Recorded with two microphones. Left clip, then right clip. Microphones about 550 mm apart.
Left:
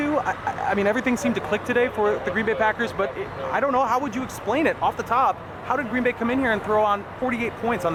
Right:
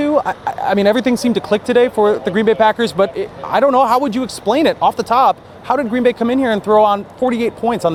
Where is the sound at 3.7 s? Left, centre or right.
Right.